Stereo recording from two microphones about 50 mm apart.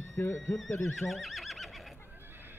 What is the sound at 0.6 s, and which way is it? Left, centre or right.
Speech, left.